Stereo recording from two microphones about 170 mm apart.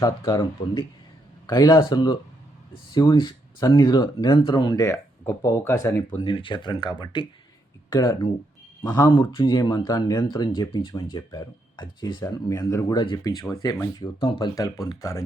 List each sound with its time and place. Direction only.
0.0 s speech: 25° left (ahead or behind)
6.2 s speech: 30° left (ahead or behind)